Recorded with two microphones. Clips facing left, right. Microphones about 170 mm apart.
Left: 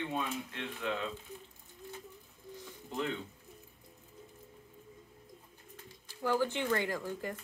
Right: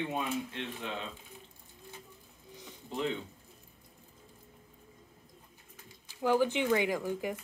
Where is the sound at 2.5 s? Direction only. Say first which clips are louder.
Right 1 dB; 15° right (ahead or behind).